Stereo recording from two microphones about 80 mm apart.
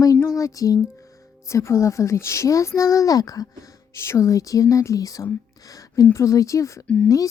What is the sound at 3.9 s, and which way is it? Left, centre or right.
Speech, left.